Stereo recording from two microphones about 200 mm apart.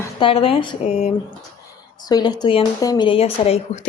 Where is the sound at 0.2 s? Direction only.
25° left (ahead or behind).